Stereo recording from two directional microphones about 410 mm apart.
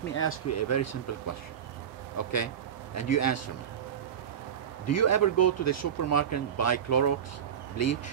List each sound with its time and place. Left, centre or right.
0.1 s speech: left
4.8 s speech: left